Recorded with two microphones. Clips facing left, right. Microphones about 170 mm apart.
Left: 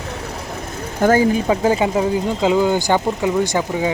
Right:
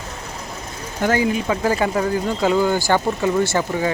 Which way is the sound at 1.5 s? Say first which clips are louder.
Left 3 dB; 20° left (ahead or behind).